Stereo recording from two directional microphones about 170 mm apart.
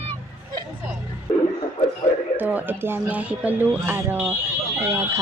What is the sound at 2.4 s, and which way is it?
Speech, 10° right (ahead or behind).